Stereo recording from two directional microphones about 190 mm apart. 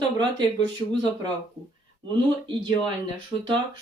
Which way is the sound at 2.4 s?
25° right (ahead or behind).